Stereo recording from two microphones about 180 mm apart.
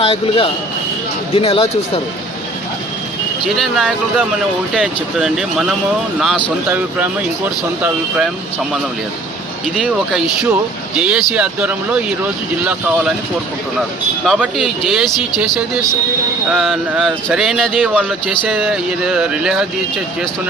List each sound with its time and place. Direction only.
0.0 s speech: 30° left (ahead or behind)
3.5 s speech: centre (ahead or behind)
9.7 s speech: centre (ahead or behind)
14.3 s speech: 5° right (ahead or behind)